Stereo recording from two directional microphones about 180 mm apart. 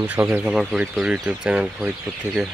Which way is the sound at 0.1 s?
5° right (ahead or behind).